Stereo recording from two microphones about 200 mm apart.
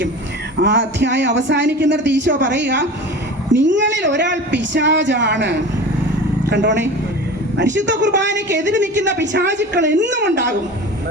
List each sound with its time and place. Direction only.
0.6 s a woman's voice: 60° right (ahead or behind)